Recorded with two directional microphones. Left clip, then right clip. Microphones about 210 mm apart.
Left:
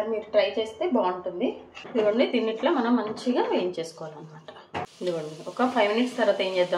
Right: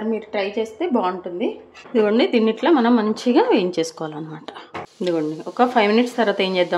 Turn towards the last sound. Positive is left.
turn(degrees=-50)  # may be behind; listen again after turning